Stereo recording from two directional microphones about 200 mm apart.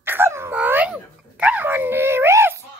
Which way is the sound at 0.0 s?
10° right (ahead or behind).